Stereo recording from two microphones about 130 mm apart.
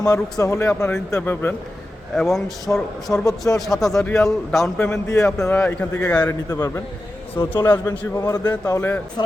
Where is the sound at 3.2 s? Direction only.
25° left (ahead or behind).